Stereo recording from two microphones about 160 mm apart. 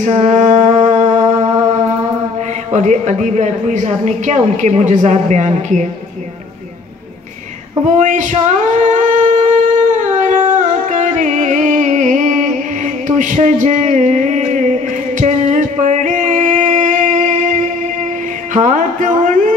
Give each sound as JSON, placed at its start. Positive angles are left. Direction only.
{"t": 0.0, "sound": "music", "side_deg": -50}
{"t": 2.7, "sound": "speech", "side_deg": -45}
{"t": 7.8, "sound": "a sound", "side_deg": -50}
{"t": 10.1, "sound": "music", "side_deg": -50}